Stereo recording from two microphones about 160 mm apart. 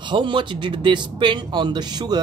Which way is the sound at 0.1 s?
30° right (ahead or behind).